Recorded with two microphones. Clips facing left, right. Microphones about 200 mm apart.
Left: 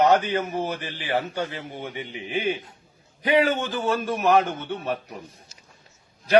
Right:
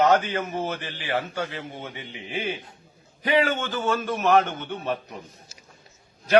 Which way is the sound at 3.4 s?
15° left (ahead or behind).